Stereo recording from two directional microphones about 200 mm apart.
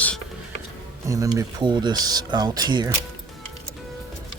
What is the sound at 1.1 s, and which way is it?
Speech, 15° right (ahead or behind).